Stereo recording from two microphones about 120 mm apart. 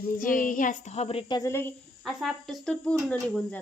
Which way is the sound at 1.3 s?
25° left (ahead or behind).